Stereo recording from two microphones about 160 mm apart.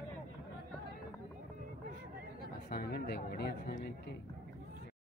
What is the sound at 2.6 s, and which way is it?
Speech, 75° left (ahead or behind).